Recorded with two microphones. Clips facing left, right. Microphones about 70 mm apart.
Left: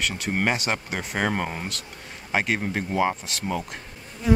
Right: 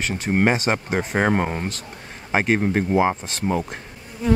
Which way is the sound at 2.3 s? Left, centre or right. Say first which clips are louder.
Right 5 dB; right.